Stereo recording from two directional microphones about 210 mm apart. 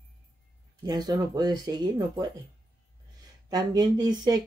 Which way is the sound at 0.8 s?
20° right (ahead or behind).